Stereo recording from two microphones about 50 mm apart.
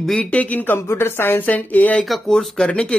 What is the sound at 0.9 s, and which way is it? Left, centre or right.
Speech, left.